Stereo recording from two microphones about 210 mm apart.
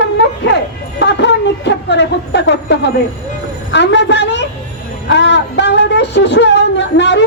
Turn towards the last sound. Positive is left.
turn(degrees=55)  # may be behind; listen again after turning